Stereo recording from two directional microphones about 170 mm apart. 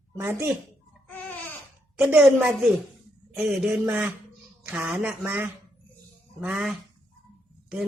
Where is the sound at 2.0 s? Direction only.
10° right (ahead or behind).